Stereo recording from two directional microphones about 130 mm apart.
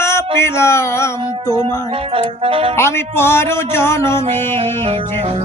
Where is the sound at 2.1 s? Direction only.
45° right (ahead or behind).